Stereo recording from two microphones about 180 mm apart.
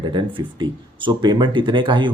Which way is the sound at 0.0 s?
25° right (ahead or behind).